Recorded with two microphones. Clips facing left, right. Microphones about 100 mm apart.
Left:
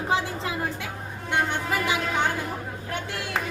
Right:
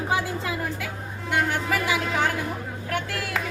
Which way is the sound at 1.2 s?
25° left (ahead or behind).